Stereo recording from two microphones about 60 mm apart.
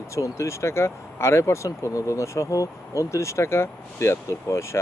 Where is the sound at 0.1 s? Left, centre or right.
Left.